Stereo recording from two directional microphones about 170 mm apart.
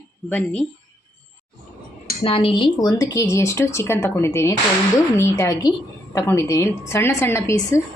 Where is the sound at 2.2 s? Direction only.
30° left (ahead or behind).